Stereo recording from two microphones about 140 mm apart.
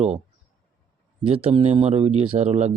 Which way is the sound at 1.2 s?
40° right (ahead or behind).